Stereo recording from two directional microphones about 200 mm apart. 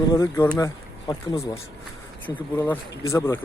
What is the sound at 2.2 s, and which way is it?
Speech, 10° left (ahead or behind).